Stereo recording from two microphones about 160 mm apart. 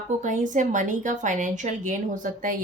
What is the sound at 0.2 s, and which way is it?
A woman's voice, 50° right (ahead or behind).